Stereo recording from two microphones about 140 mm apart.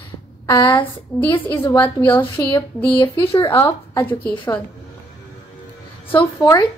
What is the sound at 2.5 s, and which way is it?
A woman's voice, 35° left (ahead or behind).